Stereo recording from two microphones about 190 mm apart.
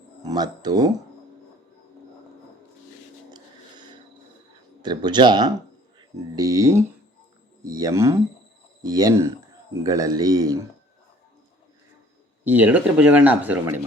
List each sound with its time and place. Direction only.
0.3 s speech: 20° right (ahead or behind)
3.3 s a sound: 25° right (ahead or behind)
4.8 s a man's voice: 25° right (ahead or behind)
12.5 s speech: 10° right (ahead or behind)